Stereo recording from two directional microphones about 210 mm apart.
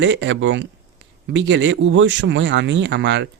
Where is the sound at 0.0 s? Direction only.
60° right (ahead or behind).